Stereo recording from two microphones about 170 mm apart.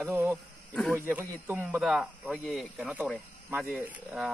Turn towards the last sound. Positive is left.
turn(degrees=-10)  # may be behind; listen again after turning